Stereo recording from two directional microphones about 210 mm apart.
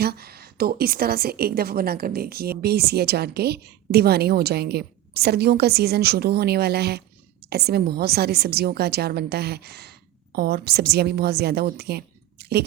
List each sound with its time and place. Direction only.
0.0 s a woman's voice: 50° right (ahead or behind)